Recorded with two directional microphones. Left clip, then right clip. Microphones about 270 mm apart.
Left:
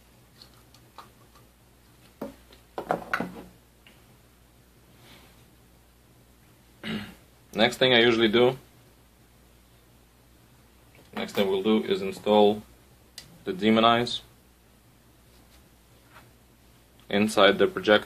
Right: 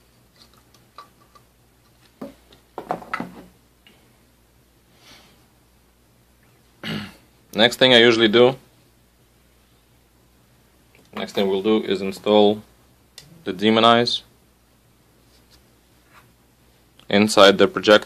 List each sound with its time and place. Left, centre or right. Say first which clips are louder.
6.8 s throat clearing: right 5 dB; right
7.5 s speech: right 7 dB; right
11.1 s speech: right 4 dB; right
17.1 s speech: right 7 dB; right